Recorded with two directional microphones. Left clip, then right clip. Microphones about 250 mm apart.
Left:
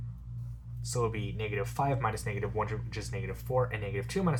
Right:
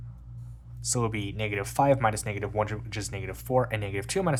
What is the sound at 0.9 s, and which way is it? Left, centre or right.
Speech, right.